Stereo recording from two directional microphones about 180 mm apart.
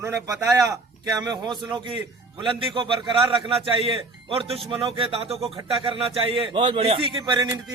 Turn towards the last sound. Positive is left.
turn(degrees=-25)  # may be behind; listen again after turning